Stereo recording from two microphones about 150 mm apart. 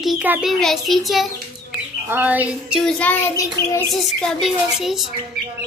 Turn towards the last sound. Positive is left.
turn(degrees=0)  # may be behind; listen again after turning